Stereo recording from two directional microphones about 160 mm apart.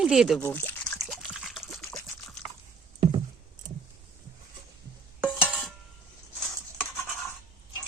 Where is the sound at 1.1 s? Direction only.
Centre (ahead or behind).